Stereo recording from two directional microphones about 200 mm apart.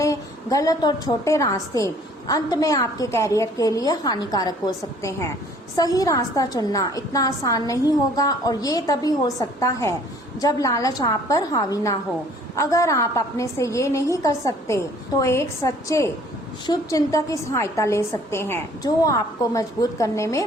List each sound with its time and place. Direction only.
0.0 s a woman's voice: 15° left (ahead or behind)